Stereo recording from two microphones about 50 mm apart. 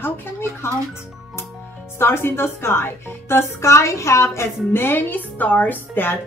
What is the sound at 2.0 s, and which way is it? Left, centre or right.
A woman's voice, left.